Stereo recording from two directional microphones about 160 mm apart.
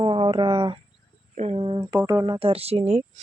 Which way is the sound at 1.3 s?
45° right (ahead or behind).